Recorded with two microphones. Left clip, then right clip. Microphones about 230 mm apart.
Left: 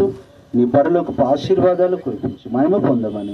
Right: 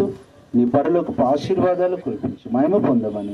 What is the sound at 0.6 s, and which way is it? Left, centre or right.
A man's voice, right.